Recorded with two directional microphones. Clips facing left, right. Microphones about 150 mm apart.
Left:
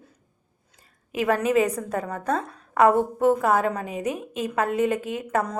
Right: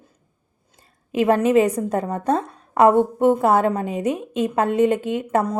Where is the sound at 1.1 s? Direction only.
25° right (ahead or behind).